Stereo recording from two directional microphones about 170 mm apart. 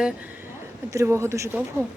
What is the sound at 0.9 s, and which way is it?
Speech, 15° right (ahead or behind).